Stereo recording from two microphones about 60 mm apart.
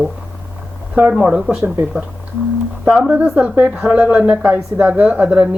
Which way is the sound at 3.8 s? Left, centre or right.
Centre.